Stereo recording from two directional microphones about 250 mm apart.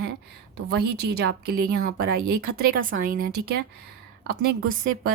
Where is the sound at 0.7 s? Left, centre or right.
Right.